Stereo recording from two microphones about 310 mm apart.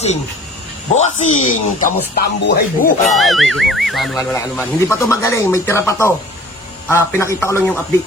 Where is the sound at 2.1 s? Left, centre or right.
Left.